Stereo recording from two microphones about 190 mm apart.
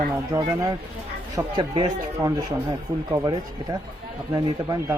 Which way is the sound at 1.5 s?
25° right (ahead or behind).